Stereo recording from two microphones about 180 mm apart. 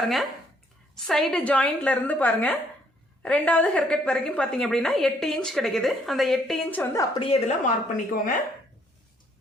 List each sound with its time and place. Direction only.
0.0 s a woman's voice: centre (ahead or behind)
7.2 s a woman's voice: 30° left (ahead or behind)
7.6 s a woman's voice: 45° left (ahead or behind)